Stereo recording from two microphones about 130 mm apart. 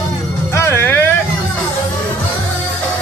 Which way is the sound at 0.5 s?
20° left (ahead or behind).